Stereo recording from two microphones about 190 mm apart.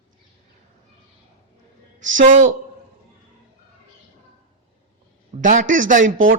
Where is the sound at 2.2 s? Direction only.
40° right (ahead or behind).